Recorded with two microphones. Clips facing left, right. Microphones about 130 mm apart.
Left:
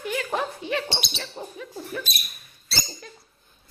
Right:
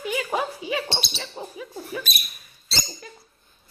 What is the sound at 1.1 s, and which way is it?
Speech, 5° right (ahead or behind).